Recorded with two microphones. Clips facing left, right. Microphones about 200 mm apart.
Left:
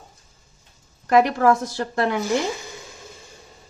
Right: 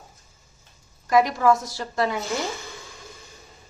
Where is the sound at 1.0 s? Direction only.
60° left (ahead or behind).